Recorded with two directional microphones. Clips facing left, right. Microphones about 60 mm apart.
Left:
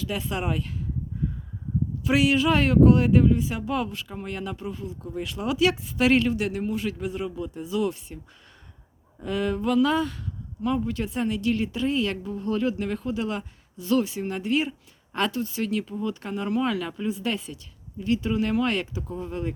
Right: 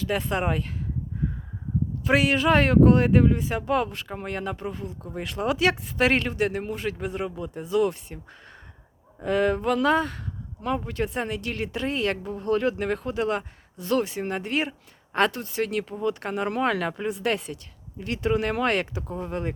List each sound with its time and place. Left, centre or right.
0.0 s speech: right
2.0 s speech: right
9.2 s speech: right